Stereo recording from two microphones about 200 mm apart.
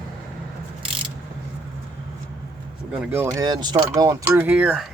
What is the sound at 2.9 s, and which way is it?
Speech, 10° right (ahead or behind).